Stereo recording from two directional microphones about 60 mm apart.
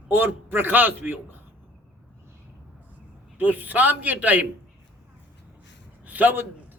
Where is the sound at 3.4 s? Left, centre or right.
Right.